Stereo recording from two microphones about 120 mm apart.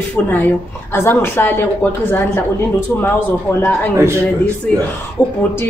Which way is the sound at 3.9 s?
20° right (ahead or behind).